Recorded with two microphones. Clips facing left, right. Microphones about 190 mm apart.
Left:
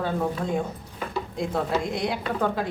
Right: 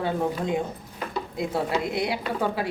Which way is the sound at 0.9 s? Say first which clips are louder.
Even; 5° right (ahead or behind).